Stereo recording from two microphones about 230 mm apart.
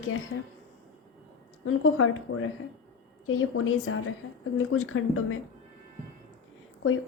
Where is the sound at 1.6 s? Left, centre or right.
Left.